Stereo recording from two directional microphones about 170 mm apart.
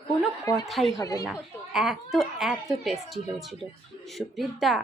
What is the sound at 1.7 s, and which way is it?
A woman's voice, centre (ahead or behind).